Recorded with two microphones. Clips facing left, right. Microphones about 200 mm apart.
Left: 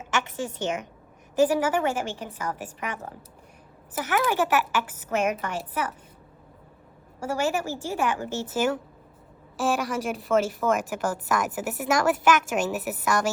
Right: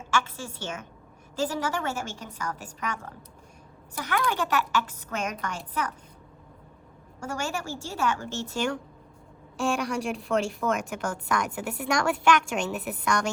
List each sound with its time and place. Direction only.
0.0 s a sound: 20° left (ahead or behind)
1.5 s a woman's voice: 10° left (ahead or behind)
3.9 s a woman's voice: 5° left (ahead or behind)
7.2 s a woman's voice: 10° left (ahead or behind)